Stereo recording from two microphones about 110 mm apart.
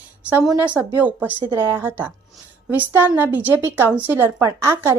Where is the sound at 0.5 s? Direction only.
15° right (ahead or behind).